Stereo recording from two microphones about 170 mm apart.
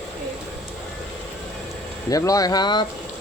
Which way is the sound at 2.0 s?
20° left (ahead or behind).